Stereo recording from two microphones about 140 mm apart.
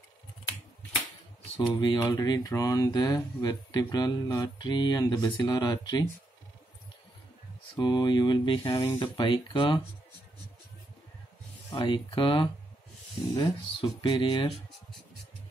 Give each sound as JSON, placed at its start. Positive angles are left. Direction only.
{"t": 1.7, "sound": "speech", "side_deg": 30}
{"t": 7.7, "sound": "speech", "side_deg": 30}
{"t": 11.7, "sound": "speech", "side_deg": 30}